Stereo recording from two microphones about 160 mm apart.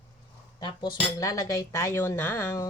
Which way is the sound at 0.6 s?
25° left (ahead or behind).